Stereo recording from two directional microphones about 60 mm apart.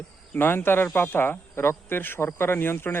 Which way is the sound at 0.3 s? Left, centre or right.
Left.